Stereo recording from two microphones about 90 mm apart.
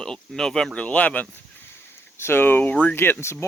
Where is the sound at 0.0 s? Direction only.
5° left (ahead or behind).